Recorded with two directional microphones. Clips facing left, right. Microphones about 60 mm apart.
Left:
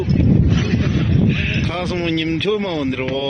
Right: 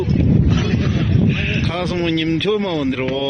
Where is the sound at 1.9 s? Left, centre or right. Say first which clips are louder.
Right 2 dB; centre.